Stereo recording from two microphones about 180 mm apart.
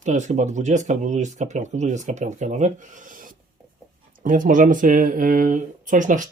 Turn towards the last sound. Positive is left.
turn(degrees=-45)  # may be behind; listen again after turning